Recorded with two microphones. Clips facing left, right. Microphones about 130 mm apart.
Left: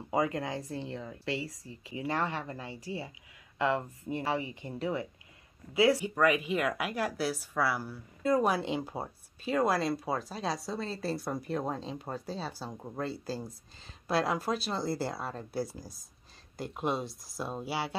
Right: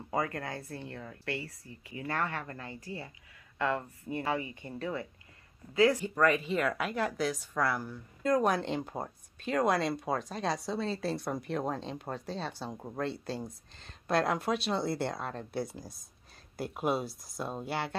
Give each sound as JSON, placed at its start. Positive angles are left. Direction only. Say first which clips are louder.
{"t": 0.1, "sound": "speech", "louder": "left 3 dB", "side_deg": 15}